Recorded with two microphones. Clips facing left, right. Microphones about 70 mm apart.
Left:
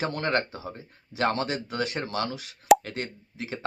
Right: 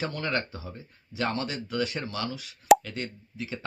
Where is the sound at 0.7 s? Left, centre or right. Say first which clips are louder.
Left 1 dB; left.